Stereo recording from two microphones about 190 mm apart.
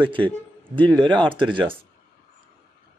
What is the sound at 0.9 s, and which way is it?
Speech, 5° left (ahead or behind).